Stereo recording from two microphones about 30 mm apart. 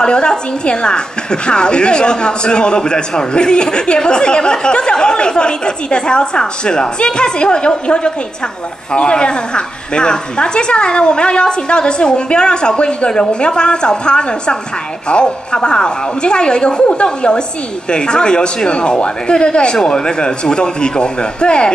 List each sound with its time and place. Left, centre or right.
0.0 s a woman's voice: left